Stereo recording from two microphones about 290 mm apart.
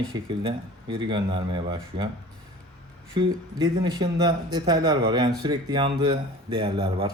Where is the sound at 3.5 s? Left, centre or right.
Centre.